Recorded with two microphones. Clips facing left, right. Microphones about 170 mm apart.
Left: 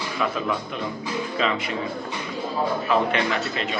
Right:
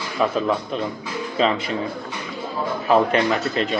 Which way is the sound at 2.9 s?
40° right (ahead or behind).